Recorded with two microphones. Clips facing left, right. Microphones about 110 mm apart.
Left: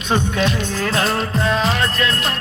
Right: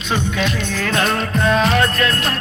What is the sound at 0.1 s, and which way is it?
Music, 40° left (ahead or behind).